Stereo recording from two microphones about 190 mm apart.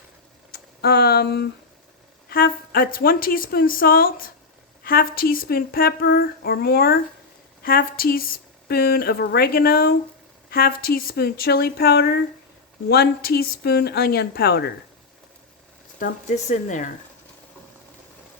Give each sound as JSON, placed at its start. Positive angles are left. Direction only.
{"t": 0.5, "sound": "a woman's voice", "side_deg": 55}
{"t": 16.0, "sound": "speech", "side_deg": 45}